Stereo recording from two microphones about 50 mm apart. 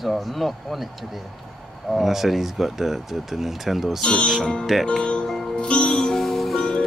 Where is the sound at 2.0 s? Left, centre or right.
Centre.